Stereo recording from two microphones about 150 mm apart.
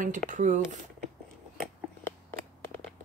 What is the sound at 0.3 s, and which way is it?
Speech, 55° right (ahead or behind).